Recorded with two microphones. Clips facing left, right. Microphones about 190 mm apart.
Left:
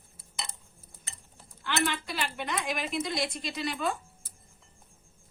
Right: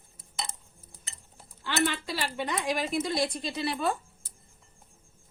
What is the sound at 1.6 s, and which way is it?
A woman's voice, 30° right (ahead or behind).